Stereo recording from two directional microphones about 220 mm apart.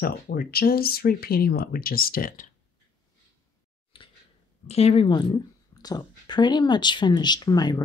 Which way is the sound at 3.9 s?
25° left (ahead or behind).